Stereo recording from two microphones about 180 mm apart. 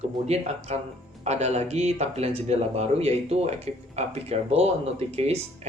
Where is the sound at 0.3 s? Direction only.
35° right (ahead or behind).